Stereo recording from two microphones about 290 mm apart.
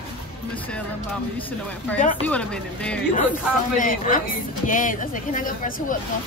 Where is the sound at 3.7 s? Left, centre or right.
Left.